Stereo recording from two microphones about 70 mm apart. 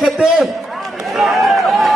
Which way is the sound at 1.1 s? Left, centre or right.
Centre.